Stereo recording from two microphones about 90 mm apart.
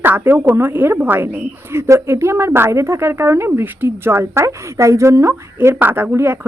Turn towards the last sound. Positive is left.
turn(degrees=-25)  # may be behind; listen again after turning